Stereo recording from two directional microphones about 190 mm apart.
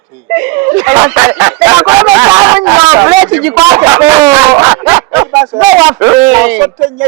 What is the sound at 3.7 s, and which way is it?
Speech, 20° right (ahead or behind).